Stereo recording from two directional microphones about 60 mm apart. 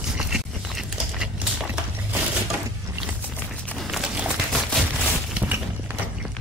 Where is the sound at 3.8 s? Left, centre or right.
Centre.